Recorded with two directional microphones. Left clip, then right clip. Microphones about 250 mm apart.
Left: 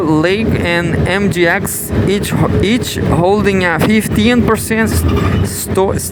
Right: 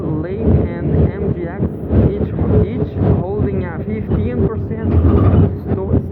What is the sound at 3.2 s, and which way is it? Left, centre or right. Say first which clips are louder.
Speech: left 10 dB; left.